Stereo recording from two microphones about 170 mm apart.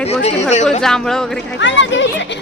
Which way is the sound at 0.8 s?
5° left (ahead or behind).